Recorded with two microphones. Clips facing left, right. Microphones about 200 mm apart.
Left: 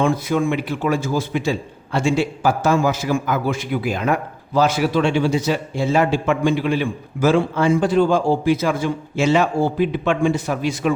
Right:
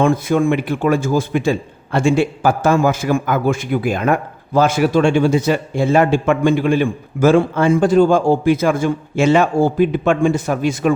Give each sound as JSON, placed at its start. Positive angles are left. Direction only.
{"t": 0.0, "sound": "a man's voice", "side_deg": -50}